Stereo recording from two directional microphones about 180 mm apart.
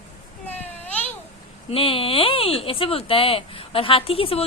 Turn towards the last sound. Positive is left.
turn(degrees=30)  # may be behind; listen again after turning